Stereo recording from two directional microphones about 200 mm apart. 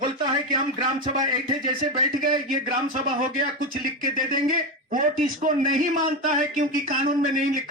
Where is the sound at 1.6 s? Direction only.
45° right (ahead or behind).